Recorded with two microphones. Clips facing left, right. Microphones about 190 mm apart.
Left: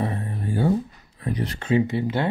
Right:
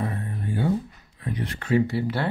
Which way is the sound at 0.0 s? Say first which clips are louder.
Left 2 dB; 30° left (ahead or behind).